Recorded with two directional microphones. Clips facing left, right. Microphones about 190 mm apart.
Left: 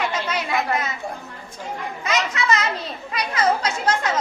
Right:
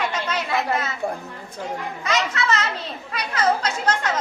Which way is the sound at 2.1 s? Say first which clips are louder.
Left 1 dB; 15° left (ahead or behind).